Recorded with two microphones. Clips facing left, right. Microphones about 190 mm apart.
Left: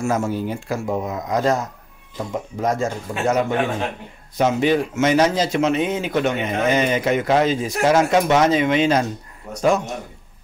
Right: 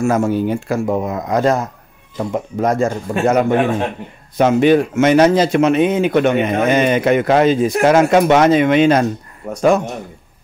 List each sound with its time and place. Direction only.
0.0 s speech: 60° right (ahead or behind)
2.6 s speech: 60° right (ahead or behind)